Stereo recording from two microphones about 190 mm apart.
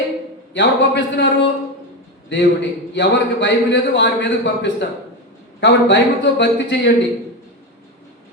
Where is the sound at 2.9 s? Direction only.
70° left (ahead or behind).